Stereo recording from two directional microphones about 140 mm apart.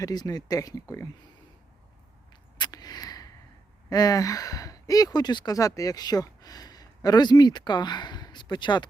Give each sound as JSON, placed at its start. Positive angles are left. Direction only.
{"t": 0.0, "sound": "speech", "side_deg": 25}
{"t": 2.6, "sound": "a sound", "side_deg": 30}
{"t": 3.8, "sound": "speech", "side_deg": 25}